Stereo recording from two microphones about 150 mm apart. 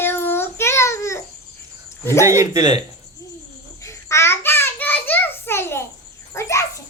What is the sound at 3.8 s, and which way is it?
Child singing, 20° left (ahead or behind).